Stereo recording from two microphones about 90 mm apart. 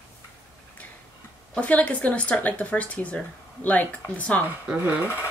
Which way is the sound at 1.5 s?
15° left (ahead or behind).